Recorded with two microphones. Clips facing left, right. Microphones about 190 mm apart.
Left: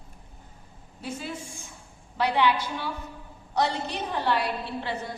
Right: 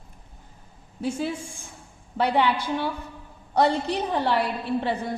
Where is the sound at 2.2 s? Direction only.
55° right (ahead or behind).